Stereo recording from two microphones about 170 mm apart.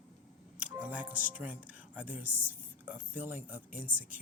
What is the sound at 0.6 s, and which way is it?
Speech, 10° right (ahead or behind).